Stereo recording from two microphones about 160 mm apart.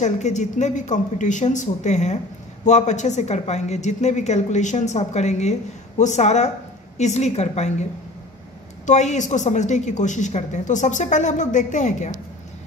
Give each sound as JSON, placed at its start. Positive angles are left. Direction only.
{"t": 0.0, "sound": "a woman's voice", "side_deg": 45}
{"t": 8.8, "sound": "a woman's voice", "side_deg": 45}